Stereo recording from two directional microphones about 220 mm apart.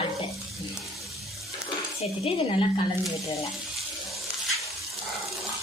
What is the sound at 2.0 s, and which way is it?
Speech, 25° left (ahead or behind).